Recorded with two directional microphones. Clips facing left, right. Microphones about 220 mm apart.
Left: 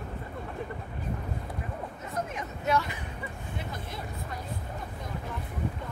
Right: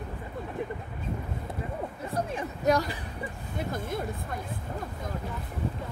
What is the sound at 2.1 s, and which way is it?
Hubbub, 30° right (ahead or behind).